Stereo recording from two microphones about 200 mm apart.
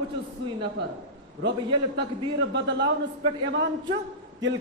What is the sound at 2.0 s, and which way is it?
A man's voice, 60° right (ahead or behind).